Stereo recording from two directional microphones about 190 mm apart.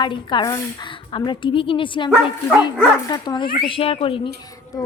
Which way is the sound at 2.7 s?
5° right (ahead or behind).